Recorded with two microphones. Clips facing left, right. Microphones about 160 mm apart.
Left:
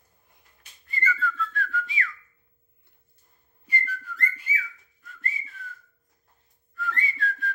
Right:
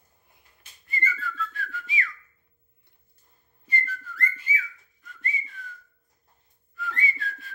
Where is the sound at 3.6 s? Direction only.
10° left (ahead or behind).